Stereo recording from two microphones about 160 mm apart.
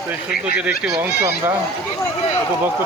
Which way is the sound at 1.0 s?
15° right (ahead or behind).